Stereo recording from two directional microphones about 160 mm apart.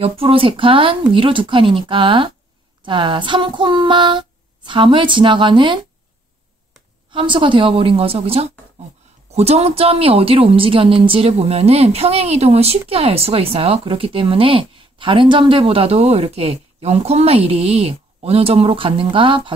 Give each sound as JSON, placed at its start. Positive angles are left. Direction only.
{"t": 0.0, "sound": "a woman's voice", "side_deg": -35}
{"t": 7.1, "sound": "a woman's voice", "side_deg": -30}